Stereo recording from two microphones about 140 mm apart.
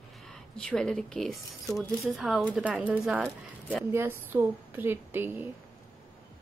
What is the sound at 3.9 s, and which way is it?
Speech, 15° right (ahead or behind).